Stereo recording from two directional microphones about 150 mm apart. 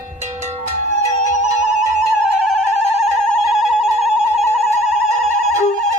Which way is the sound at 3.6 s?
Centre (ahead or behind).